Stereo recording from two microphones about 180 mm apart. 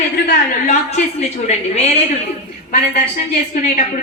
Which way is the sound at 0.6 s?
45° left (ahead or behind).